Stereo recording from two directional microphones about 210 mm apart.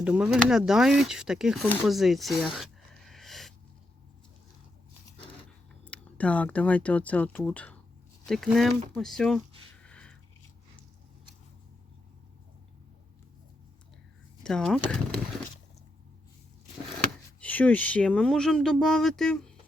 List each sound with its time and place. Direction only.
0.0 s speech: 5° right (ahead or behind)
3.1 s a sound: centre (ahead or behind)
5.8 s speech: 5° left (ahead or behind)
9.8 s biting: 5° left (ahead or behind)
14.4 s speech: 5° left (ahead or behind)
17.4 s speech: 5° left (ahead or behind)